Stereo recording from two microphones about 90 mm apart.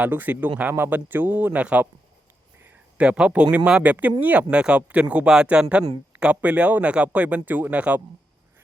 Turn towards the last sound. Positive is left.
turn(degrees=-15)  # may be behind; listen again after turning